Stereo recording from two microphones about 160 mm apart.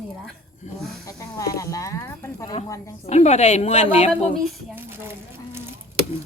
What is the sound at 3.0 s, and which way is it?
A woman's voice, 45° left (ahead or behind).